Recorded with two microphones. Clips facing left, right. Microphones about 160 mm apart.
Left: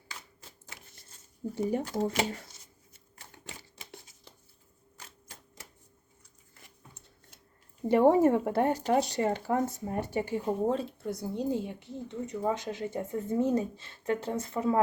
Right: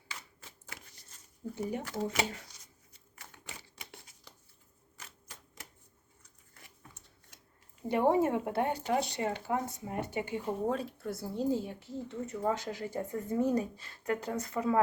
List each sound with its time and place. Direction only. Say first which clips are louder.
1.5 s speech: left 6 dB; 30° left (ahead or behind)
3.2 s typewriter: left 2 dB; 30° left (ahead or behind)
4.9 s typewriter: left 1 dB; 30° left (ahead or behind)
7.9 s speech: left 5 dB; 40° left (ahead or behind)